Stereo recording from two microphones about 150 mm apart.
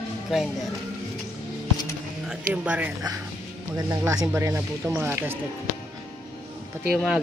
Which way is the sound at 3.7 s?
25° right (ahead or behind).